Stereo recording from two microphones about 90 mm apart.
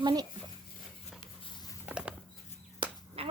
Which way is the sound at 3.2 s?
90° right.